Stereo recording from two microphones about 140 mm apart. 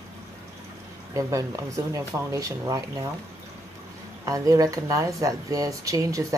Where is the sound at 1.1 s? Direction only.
25° right (ahead or behind).